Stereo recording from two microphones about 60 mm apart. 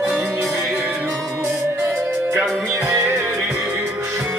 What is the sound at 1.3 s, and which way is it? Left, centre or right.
Music, right.